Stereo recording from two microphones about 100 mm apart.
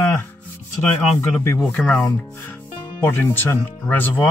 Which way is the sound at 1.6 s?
10° left (ahead or behind).